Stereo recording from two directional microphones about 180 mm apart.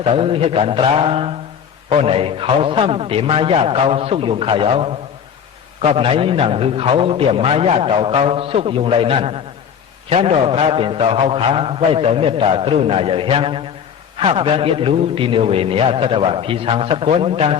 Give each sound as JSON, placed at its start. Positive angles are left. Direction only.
{"t": 0.0, "sound": "a man's voice", "side_deg": -35}